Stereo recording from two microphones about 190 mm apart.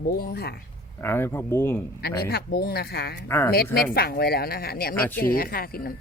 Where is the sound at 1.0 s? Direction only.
10° left (ahead or behind).